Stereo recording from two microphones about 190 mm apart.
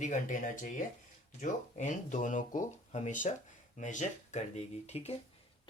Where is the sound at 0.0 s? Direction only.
40° left (ahead or behind).